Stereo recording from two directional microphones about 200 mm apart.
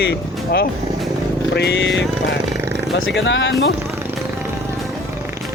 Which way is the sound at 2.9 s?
70° left (ahead or behind).